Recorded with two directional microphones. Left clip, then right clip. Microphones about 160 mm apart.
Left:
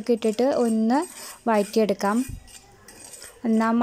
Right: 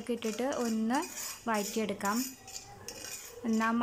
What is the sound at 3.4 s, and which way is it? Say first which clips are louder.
Speech: left 8 dB; 25° left (ahead or behind).